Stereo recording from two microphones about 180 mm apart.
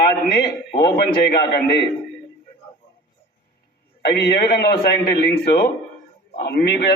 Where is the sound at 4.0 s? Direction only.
60° left (ahead or behind).